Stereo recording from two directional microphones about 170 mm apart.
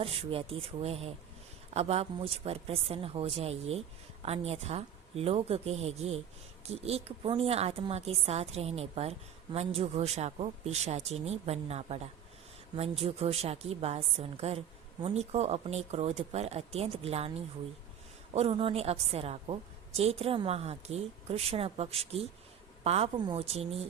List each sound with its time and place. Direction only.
0.0 s a woman's voice: 35° right (ahead or behind)
18.3 s a woman's voice: 35° right (ahead or behind)